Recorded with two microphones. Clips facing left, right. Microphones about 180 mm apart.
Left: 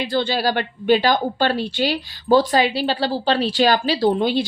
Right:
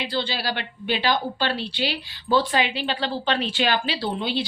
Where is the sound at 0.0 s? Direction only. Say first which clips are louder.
Left 7 dB; 50° left (ahead or behind).